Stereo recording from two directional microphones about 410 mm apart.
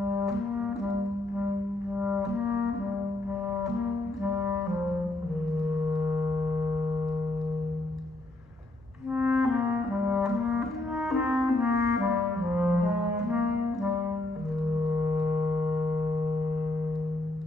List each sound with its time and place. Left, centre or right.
0.0 s brass instrument: centre
2.0 s music: centre
4.2 s music: centre
9.1 s music: centre
11.1 s clarinet: centre
15.1 s a sound: centre